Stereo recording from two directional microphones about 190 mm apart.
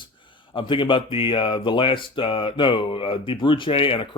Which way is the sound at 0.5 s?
25° left (ahead or behind).